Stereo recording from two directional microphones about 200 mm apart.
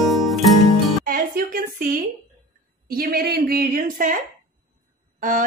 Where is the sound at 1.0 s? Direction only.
45° right (ahead or behind).